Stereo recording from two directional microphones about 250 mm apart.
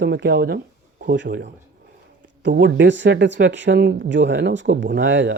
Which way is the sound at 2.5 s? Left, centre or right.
Right.